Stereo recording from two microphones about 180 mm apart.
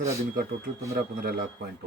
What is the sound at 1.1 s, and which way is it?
Speech, 55° right (ahead or behind).